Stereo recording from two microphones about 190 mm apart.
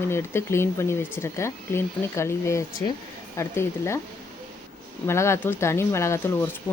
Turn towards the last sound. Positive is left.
turn(degrees=15)  # may be behind; listen again after turning